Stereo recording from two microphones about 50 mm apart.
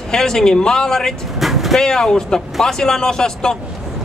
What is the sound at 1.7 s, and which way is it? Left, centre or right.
A man's voice, centre.